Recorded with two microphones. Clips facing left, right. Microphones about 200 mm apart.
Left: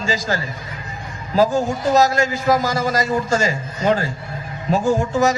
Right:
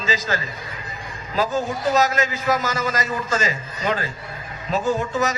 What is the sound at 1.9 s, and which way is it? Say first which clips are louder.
A man's voice: left 5 dB; 40° left (ahead or behind).